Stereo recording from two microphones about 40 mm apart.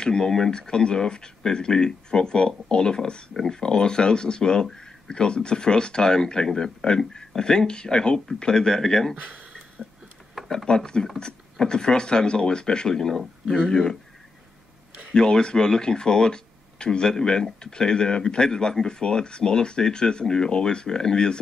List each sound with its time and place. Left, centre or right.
0.0 s speech: centre
9.1 s speech: right
10.7 s speech: centre
15.1 s speech: centre